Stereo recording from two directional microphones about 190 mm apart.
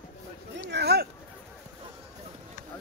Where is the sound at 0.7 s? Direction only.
60° right (ahead or behind).